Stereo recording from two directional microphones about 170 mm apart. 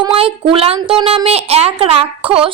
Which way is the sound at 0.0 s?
30° right (ahead or behind).